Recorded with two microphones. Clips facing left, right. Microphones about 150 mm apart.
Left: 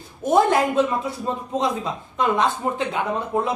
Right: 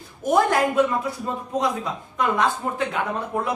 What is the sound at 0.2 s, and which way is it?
A woman's voice, 25° left (ahead or behind).